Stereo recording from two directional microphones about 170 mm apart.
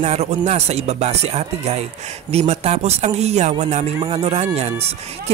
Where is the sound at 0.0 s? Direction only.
40° right (ahead or behind).